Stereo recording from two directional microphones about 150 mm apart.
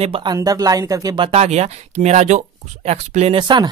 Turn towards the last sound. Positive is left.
turn(degrees=-30)  # may be behind; listen again after turning